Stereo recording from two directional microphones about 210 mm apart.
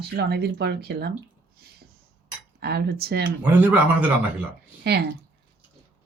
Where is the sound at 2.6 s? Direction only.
50° right (ahead or behind).